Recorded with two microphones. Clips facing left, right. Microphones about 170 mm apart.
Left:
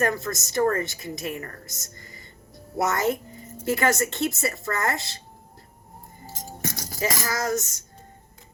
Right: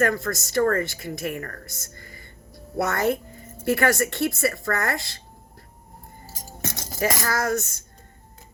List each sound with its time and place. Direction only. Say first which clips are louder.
0.0 s speech: right 2 dB; 20° left (ahead or behind)
6.6 s music: right 1 dB; 25° right (ahead or behind)
7.4 s speech: left 1 dB; 20° left (ahead or behind)